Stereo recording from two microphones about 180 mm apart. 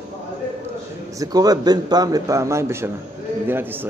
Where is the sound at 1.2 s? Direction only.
20° right (ahead or behind).